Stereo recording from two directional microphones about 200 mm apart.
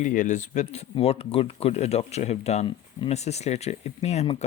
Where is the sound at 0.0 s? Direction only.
40° left (ahead or behind).